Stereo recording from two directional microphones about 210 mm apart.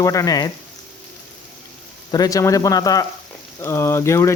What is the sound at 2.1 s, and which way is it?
Speech, 15° left (ahead or behind).